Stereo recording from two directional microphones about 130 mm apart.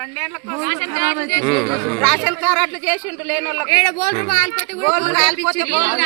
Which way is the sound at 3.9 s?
60° left (ahead or behind).